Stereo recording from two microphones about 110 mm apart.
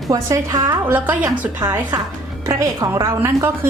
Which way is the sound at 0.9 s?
15° right (ahead or behind).